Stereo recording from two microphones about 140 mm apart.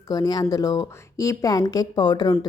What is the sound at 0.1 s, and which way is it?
A woman's voice, 25° left (ahead or behind).